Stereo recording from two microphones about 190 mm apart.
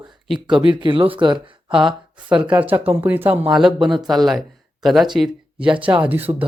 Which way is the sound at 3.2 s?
30° right (ahead or behind).